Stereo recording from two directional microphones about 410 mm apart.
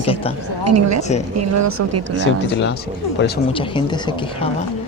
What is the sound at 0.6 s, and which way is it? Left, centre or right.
Speech, right.